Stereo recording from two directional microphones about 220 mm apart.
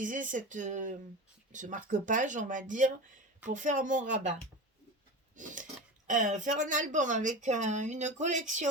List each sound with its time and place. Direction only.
0.0 s speech: 35° right (ahead or behind)
5.4 s a sound: 35° right (ahead or behind)
6.1 s speech: 35° right (ahead or behind)